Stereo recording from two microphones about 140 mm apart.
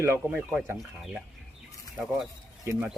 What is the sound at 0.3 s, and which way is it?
Speech, 5° right (ahead or behind).